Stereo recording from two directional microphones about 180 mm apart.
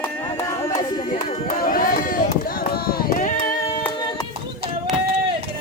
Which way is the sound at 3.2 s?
50° left (ahead or behind).